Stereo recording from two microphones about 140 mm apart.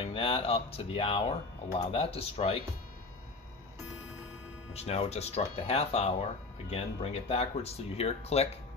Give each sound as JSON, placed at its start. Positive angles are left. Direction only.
{"t": 0.1, "sound": "speech", "side_deg": 40}
{"t": 4.7, "sound": "speech", "side_deg": 45}